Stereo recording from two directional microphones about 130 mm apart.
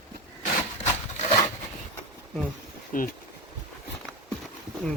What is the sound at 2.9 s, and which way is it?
Speech, 90° left.